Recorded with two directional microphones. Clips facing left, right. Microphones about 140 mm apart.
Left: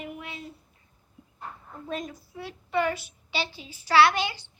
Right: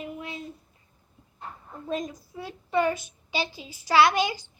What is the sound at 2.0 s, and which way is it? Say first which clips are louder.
A woman's voice: right 2 dB; 15° right (ahead or behind).